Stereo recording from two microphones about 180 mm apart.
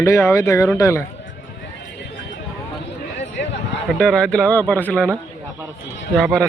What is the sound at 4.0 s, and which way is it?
Speech, 5° left (ahead or behind).